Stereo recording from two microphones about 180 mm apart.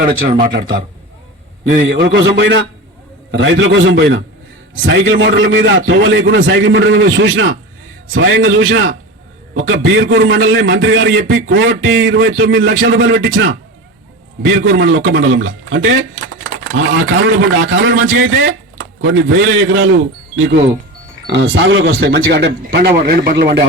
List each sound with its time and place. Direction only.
2.0 s a man's voice: 85° right
17.2 s a man's voice: 90° right
20.4 s speech: 75° right (ahead or behind)
21.2 s speech: 85° right; by 23.6 s 65° right (ahead or behind)